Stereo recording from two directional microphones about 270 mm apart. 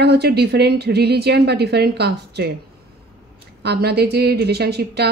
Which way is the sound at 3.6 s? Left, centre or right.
Right.